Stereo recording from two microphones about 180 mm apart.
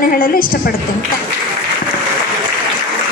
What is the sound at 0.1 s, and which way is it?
Speech, 50° left (ahead or behind).